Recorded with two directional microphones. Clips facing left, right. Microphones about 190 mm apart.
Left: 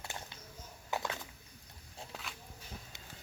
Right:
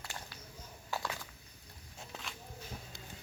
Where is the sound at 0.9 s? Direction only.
20° left (ahead or behind).